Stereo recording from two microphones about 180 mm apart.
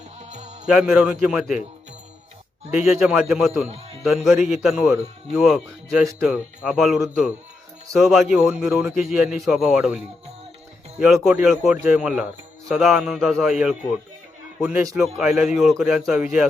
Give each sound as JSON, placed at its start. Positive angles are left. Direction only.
{"t": 0.2, "sound": "music", "side_deg": -40}
{"t": 0.7, "sound": "a man's voice", "side_deg": -5}
{"t": 2.8, "sound": "a man's voice", "side_deg": -5}
{"t": 11.0, "sound": "a man's voice", "side_deg": -5}